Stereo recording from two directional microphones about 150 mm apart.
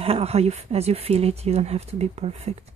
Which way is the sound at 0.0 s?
40° right (ahead or behind).